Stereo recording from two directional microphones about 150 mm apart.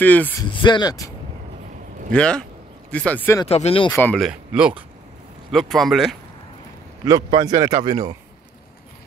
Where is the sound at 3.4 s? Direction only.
45° left (ahead or behind).